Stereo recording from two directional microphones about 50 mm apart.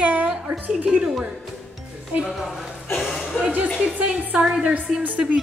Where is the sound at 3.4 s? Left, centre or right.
Left.